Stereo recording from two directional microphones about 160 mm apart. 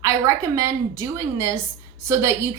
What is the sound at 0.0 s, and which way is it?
A woman's voice, 20° right (ahead or behind).